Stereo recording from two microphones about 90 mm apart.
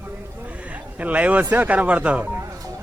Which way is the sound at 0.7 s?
15° right (ahead or behind).